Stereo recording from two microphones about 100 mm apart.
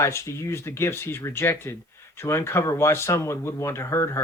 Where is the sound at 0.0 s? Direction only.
30° left (ahead or behind).